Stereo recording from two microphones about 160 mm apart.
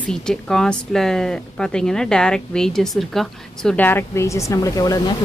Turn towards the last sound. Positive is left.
turn(degrees=25)  # may be behind; listen again after turning